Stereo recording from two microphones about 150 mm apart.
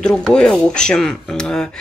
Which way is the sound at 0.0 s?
5° left (ahead or behind).